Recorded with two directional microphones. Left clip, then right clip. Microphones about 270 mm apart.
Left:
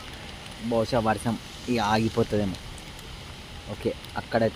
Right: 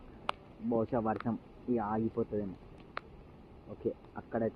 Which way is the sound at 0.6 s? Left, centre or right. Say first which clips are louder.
Left 8 dB; centre.